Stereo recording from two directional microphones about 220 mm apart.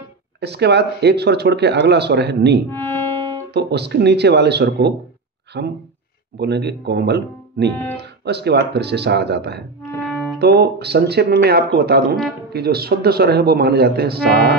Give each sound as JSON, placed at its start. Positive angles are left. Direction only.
{"t": 0.4, "sound": "speech", "side_deg": -50}
{"t": 2.7, "sound": "music", "side_deg": 10}
{"t": 3.5, "sound": "speech", "side_deg": -50}
{"t": 9.8, "sound": "music", "side_deg": 0}
{"t": 10.4, "sound": "speech", "side_deg": -45}